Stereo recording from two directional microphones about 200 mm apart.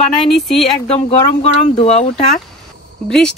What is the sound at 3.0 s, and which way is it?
Speech, 5° left (ahead or behind).